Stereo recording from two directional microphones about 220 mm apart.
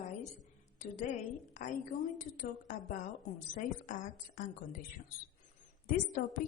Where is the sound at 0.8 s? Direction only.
35° left (ahead or behind).